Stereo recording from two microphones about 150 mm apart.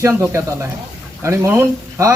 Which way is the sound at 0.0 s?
20° right (ahead or behind).